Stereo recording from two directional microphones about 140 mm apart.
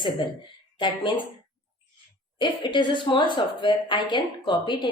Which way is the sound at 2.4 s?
35° left (ahead or behind).